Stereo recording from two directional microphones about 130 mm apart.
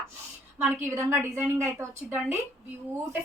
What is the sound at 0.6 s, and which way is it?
A woman's voice, 20° right (ahead or behind).